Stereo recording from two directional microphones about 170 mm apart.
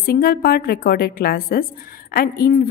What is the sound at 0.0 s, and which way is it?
A woman's voice, 60° left (ahead or behind).